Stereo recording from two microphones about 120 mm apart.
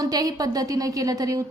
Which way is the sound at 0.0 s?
30° right (ahead or behind).